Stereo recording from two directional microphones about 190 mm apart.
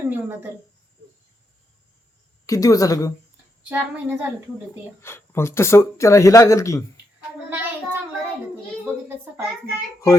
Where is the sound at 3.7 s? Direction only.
10° right (ahead or behind).